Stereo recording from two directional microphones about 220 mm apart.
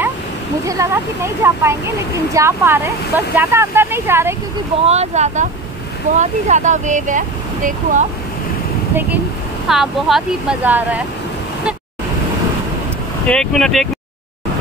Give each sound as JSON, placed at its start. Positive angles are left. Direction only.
{"t": 0.7, "sound": "speech", "side_deg": -15}
{"t": 4.8, "sound": "speech", "side_deg": -30}
{"t": 9.7, "sound": "speech", "side_deg": 0}
{"t": 13.3, "sound": "speech", "side_deg": 5}